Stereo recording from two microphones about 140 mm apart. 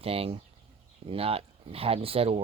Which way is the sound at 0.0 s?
45° right (ahead or behind).